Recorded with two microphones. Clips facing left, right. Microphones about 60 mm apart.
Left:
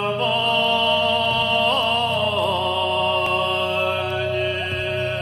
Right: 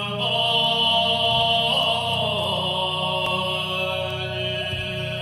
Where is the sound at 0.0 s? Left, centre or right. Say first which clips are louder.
Left 4 dB; left.